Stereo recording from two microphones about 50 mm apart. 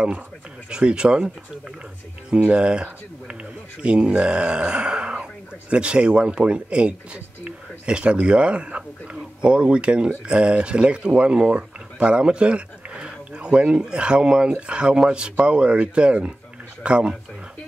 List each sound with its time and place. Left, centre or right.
0.7 s speech: centre
2.5 s speech: centre